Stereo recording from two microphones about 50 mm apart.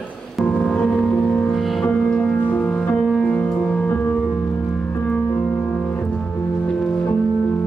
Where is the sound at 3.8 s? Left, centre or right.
Left.